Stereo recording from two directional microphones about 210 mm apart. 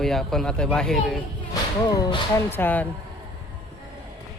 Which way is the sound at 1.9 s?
20° left (ahead or behind).